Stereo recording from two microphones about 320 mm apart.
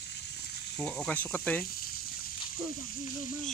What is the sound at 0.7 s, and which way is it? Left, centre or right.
Speech, centre.